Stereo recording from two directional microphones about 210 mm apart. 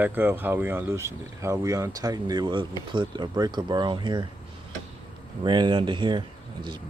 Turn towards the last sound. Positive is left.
turn(degrees=-20)  # may be behind; listen again after turning